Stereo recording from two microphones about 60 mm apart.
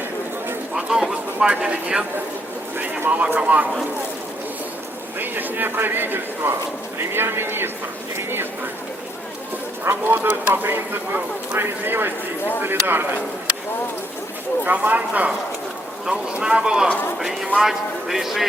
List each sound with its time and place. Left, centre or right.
0.8 s speech: centre
3.1 s speech: right
5.2 s speech: right
9.8 s speech: right
14.6 s speech: right
16.0 s a man's voice: centre